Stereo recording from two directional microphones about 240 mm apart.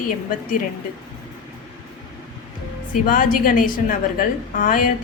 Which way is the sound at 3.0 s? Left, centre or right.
Left.